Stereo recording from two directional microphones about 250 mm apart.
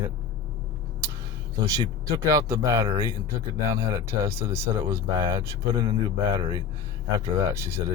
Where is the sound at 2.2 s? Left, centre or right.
Centre.